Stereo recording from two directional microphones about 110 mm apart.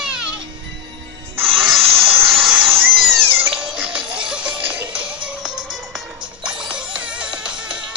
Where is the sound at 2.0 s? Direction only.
60° right (ahead or behind).